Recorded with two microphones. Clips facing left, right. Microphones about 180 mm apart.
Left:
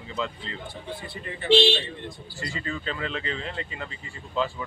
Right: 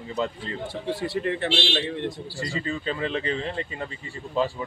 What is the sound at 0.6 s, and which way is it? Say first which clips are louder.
Speech: right 12 dB; 80° right.